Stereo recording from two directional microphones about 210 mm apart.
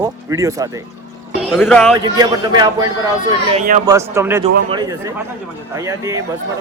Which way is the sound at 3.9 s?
15° right (ahead or behind).